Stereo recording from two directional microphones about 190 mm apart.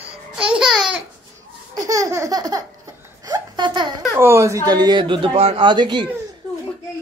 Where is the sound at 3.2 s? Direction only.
20° right (ahead or behind).